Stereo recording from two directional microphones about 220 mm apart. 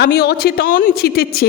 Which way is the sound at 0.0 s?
45° left (ahead or behind).